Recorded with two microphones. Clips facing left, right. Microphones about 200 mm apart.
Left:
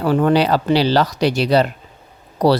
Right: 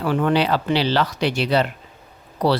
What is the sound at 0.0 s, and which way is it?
Speech, 40° left (ahead or behind).